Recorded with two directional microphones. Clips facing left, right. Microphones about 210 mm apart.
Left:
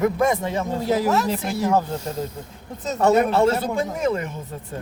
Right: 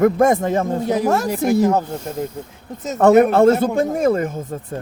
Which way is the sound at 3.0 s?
55° right (ahead or behind).